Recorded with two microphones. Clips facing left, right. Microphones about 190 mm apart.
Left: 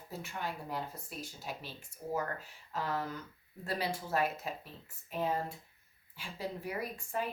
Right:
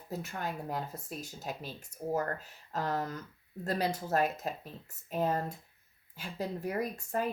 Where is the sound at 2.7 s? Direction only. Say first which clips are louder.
Right 3 dB; 40° right (ahead or behind).